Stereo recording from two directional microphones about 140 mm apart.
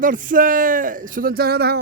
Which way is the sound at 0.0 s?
70° right (ahead or behind).